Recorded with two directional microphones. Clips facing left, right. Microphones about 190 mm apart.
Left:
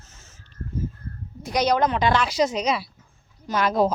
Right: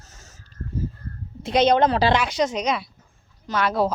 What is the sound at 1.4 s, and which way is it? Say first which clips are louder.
Speech: right 4 dB; 25° right (ahead or behind).